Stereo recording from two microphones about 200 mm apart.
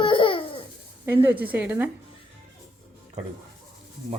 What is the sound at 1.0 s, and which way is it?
Speech, 15° right (ahead or behind).